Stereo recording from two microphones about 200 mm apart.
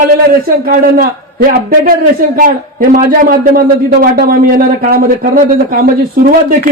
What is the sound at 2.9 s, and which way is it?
A man's voice, 45° right (ahead or behind).